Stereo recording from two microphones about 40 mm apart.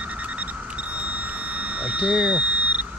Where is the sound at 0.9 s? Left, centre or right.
Right.